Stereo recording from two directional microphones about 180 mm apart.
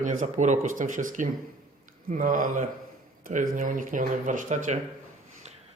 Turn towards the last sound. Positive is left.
turn(degrees=-45)  # may be behind; listen again after turning